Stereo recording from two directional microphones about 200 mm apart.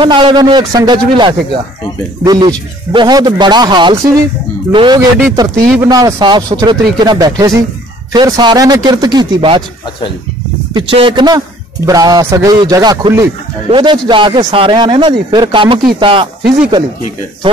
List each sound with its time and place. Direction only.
0.0 s a man's voice: 25° right (ahead or behind)
10.7 s a man's voice: 25° right (ahead or behind)